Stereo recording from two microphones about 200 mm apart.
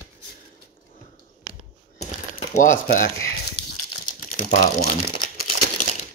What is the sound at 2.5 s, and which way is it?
Speech, 40° left (ahead or behind).